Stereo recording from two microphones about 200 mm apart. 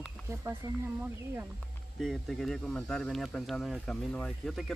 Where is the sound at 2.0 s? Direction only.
Centre (ahead or behind).